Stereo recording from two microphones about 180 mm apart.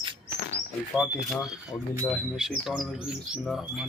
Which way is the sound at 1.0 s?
Centre (ahead or behind).